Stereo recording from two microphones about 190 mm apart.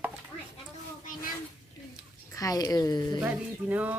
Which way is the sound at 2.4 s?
20° left (ahead or behind).